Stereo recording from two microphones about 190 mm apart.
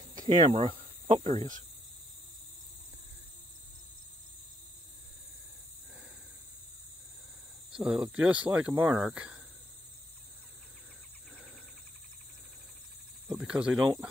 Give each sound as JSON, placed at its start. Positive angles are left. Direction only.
{"t": 0.2, "sound": "cricket", "side_deg": -30}
{"t": 7.7, "sound": "speech", "side_deg": -5}
{"t": 13.3, "sound": "cricket", "side_deg": -5}